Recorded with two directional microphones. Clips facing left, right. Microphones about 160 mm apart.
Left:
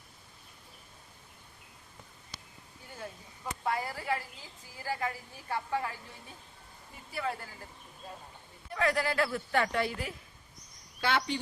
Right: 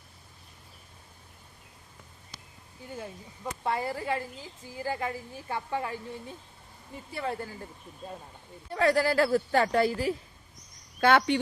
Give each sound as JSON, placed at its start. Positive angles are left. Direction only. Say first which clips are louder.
{"t": 3.6, "sound": "a woman's voice", "louder": "right 3 dB", "side_deg": -25}
{"t": 7.1, "sound": "a woman's voice", "louder": "right 2 dB", "side_deg": -25}
{"t": 8.7, "sound": "a woman's voice", "louder": "right 6 dB", "side_deg": -35}
{"t": 11.0, "sound": "speech", "louder": "right 8 dB", "side_deg": -55}